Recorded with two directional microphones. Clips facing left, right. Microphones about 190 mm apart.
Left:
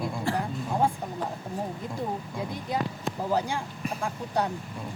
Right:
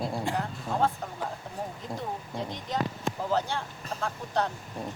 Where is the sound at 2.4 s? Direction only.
10° left (ahead or behind).